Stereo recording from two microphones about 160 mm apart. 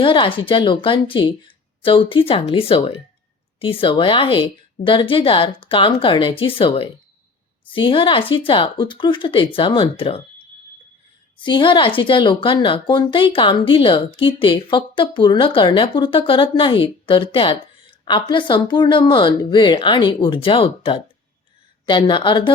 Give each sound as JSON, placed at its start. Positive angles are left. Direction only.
{"t": 0.0, "sound": "speech", "side_deg": 30}
{"t": 11.3, "sound": "speech", "side_deg": 30}